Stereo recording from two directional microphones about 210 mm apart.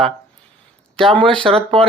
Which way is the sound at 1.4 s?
25° right (ahead or behind).